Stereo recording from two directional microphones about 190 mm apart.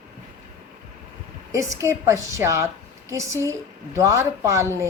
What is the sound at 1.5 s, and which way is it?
Speech, 15° right (ahead or behind).